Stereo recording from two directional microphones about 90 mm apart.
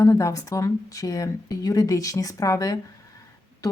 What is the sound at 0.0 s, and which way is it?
Speech, 35° left (ahead or behind).